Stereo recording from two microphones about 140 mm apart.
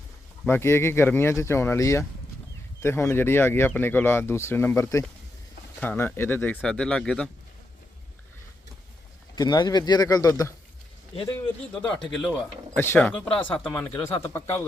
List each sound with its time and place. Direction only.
0.4 s speech: 15° left (ahead or behind)
9.3 s speech: 30° left (ahead or behind)
11.1 s speech: 40° left (ahead or behind)
11.8 s speech: 5° left (ahead or behind)